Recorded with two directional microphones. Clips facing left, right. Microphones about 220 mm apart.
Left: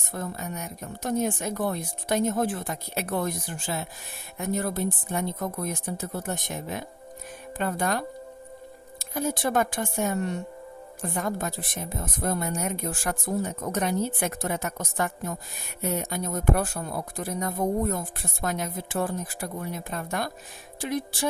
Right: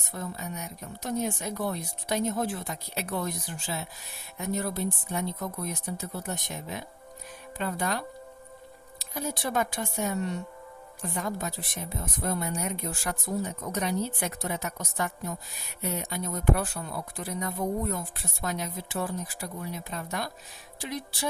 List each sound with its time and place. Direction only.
0.1 s a woman's voice: 50° left (ahead or behind)